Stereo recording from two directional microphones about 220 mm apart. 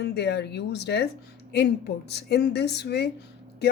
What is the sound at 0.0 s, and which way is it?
Speech, 50° left (ahead or behind).